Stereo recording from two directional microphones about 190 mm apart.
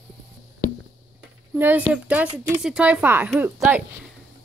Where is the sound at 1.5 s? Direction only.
10° right (ahead or behind).